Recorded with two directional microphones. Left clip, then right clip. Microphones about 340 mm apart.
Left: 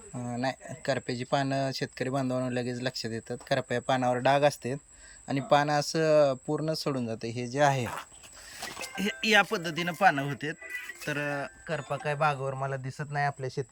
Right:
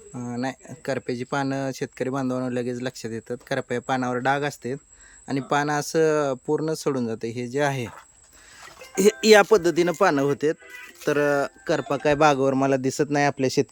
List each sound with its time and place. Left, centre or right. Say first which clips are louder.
0.2 s speech: right 2 dB; centre
9.0 s a man's voice: right 9 dB; centre